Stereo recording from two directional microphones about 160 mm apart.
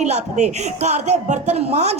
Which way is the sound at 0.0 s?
45° right (ahead or behind).